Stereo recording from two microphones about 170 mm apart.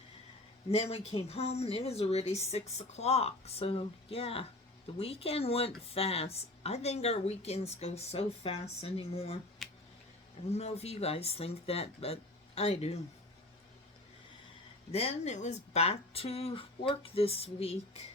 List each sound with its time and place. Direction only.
0.7 s speech: 35° left (ahead or behind)
9.6 s a sound: centre (ahead or behind)
10.5 s speech: 40° left (ahead or behind)
14.9 s speech: 40° left (ahead or behind)